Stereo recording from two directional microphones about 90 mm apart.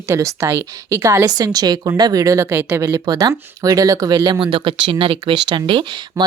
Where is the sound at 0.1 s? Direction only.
35° right (ahead or behind).